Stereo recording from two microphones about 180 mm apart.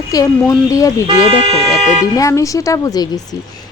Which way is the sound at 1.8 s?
35° right (ahead or behind).